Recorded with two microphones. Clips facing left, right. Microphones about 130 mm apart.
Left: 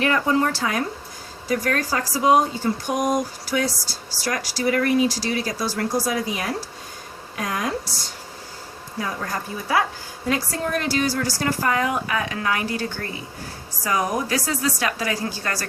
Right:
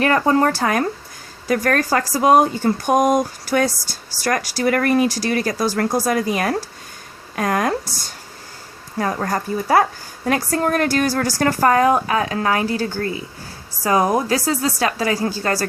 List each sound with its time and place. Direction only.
0.0 s a woman's voice: 45° right (ahead or behind)
9.0 s a woman's voice: 55° right (ahead or behind)
11.9 s speech: 35° right (ahead or behind)